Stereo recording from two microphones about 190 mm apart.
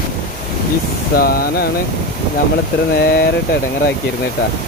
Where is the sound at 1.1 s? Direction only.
50° left (ahead or behind).